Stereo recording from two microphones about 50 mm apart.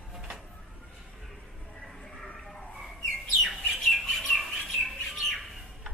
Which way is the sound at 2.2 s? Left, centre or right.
Centre.